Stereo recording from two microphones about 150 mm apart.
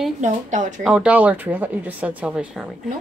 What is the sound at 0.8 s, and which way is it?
Speech, 5° right (ahead or behind).